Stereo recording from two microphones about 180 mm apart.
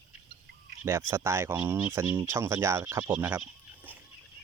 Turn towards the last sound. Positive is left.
turn(degrees=-10)  # may be behind; listen again after turning